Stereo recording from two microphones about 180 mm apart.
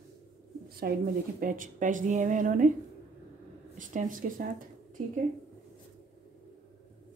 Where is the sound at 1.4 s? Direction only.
45° right (ahead or behind).